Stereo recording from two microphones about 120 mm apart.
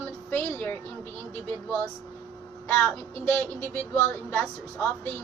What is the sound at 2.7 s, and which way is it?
A woman's voice, 15° left (ahead or behind).